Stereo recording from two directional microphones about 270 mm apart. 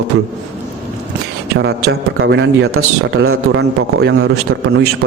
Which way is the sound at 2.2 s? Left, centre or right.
Right.